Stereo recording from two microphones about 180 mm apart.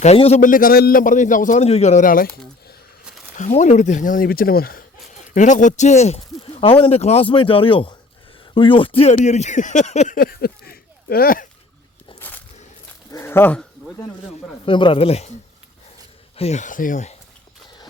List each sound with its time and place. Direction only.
0.0 s a man's voice: 35° left (ahead or behind); by 2.4 s 55° left (ahead or behind)
3.3 s a man's voice: 45° left (ahead or behind)
5.3 s speech: 45° left (ahead or behind)
13.1 s dog: 15° left (ahead or behind)
14.6 s speech: 30° left (ahead or behind)
16.4 s speech: 40° left (ahead or behind)